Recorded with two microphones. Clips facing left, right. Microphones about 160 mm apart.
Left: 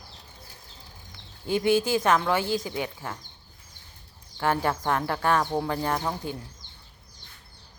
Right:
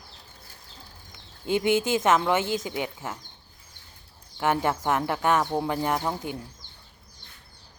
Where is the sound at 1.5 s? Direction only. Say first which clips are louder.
Even; 20° right (ahead or behind).